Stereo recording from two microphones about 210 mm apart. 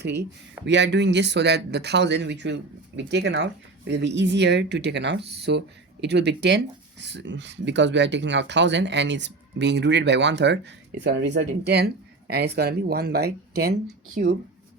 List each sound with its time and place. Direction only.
0.6 s speech: 55° right (ahead or behind)
14.2 s speech: 40° right (ahead or behind)